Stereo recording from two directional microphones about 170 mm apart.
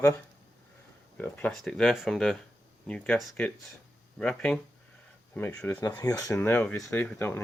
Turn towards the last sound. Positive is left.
turn(degrees=5)  # may be behind; listen again after turning